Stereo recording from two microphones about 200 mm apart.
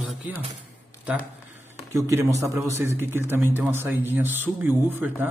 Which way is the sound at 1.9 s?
15° right (ahead or behind).